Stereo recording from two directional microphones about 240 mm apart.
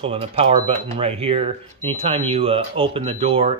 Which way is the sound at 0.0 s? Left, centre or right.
Right.